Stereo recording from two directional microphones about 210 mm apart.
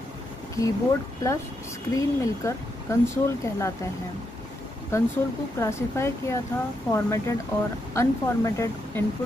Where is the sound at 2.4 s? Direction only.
15° left (ahead or behind).